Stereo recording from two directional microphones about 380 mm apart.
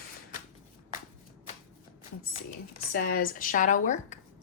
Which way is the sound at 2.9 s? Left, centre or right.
Left.